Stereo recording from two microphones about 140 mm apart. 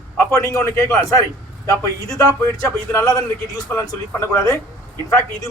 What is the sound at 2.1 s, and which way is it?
A man's voice, 25° left (ahead or behind).